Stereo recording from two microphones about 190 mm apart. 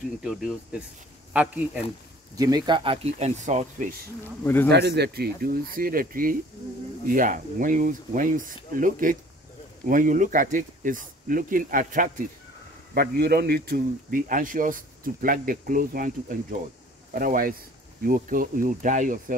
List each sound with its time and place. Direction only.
0.2 s a man's voice: 5° right (ahead or behind)
2.3 s speech: 20° right (ahead or behind); by 3.9 s 40° right (ahead or behind)
4.6 s a man's voice: 60° right (ahead or behind)
12.9 s a man's voice: 55° right (ahead or behind)